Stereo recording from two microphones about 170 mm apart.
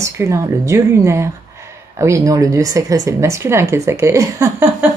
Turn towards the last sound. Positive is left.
turn(degrees=-15)  # may be behind; listen again after turning